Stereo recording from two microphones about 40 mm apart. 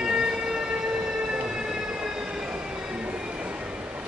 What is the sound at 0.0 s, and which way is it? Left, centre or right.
Train, right.